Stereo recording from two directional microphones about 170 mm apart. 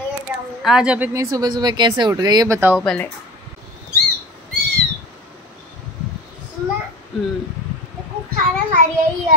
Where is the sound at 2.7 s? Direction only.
5° left (ahead or behind).